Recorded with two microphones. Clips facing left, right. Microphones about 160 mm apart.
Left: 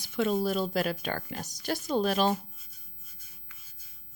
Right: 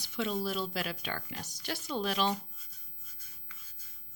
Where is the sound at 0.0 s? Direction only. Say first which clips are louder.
Left 6 dB; 50° left (ahead or behind).